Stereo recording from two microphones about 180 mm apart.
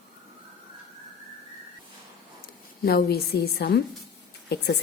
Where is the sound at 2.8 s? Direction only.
55° left (ahead or behind).